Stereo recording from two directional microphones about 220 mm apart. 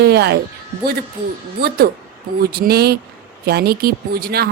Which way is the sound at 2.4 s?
45° right (ahead or behind).